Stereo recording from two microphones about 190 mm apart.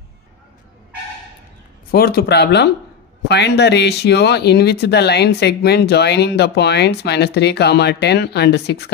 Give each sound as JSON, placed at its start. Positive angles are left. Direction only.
{"t": 1.9, "sound": "speech", "side_deg": 55}